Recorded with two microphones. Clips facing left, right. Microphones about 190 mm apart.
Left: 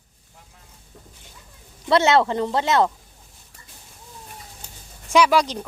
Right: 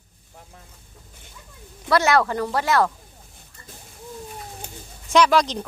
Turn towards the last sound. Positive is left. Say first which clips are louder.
# even
turn(degrees=10)  # may be behind; listen again after turning